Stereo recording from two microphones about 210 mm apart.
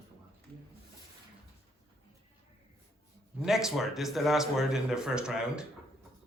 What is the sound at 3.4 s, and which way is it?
Speech, centre (ahead or behind).